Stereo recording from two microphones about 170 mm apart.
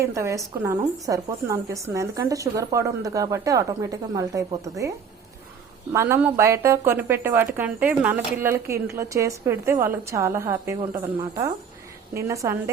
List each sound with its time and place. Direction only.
0.0 s a woman's voice: 15° right (ahead or behind)
5.9 s speech: 15° right (ahead or behind)